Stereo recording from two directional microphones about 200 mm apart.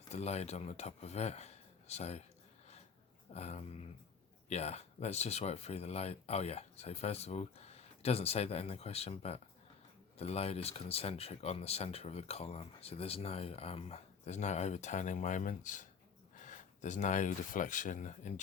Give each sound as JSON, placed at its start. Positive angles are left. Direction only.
{"t": 0.1, "sound": "speech", "side_deg": 35}
{"t": 3.3, "sound": "speech", "side_deg": 30}